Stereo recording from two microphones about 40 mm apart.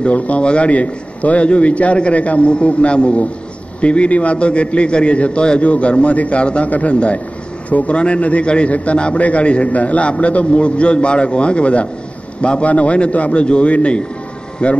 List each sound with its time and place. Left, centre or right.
0.0 s a man's voice: left